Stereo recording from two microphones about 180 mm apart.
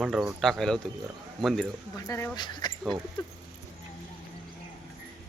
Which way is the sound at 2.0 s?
20° left (ahead or behind).